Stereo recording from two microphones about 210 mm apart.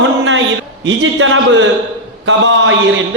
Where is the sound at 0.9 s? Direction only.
65° right (ahead or behind).